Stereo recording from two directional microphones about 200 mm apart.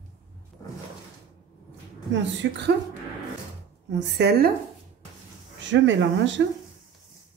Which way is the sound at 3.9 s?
60° right (ahead or behind).